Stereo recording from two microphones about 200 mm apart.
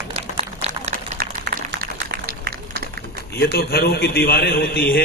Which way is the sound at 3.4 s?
50° left (ahead or behind).